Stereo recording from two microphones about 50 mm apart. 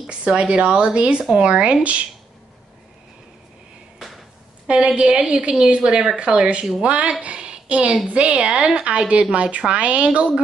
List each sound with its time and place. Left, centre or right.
0.1 s a woman's voice: right
4.6 s a woman's voice: right